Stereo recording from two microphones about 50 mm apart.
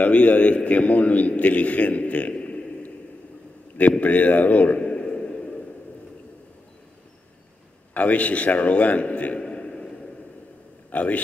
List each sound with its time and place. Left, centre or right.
0.0 s a man's voice: left
4.0 s a man's voice: left
4.7 s a sound: centre
7.9 s a man's voice: left
10.9 s a man's voice: left